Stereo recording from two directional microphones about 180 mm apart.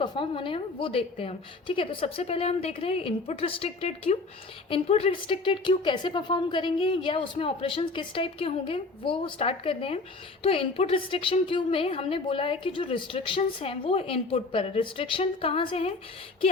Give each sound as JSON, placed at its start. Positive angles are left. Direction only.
{"t": 0.0, "sound": "a woman's voice", "side_deg": 30}